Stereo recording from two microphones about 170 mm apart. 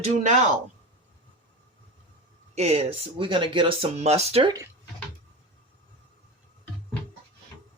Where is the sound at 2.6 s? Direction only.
35° right (ahead or behind).